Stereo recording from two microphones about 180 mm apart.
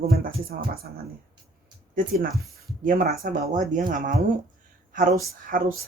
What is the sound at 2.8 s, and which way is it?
Speech, 50° right (ahead or behind).